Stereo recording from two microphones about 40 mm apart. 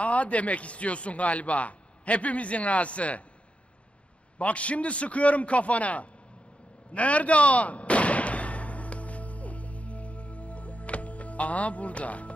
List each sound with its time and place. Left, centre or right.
0.0 s a man's voice: left
4.4 s a man's voice: left
6.9 s gunshot: left